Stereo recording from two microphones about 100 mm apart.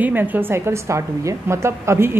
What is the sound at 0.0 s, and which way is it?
A woman's voice, 20° right (ahead or behind).